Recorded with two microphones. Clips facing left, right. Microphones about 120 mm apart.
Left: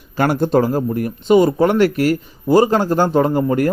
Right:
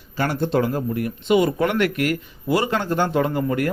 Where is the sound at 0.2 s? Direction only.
45° left (ahead or behind).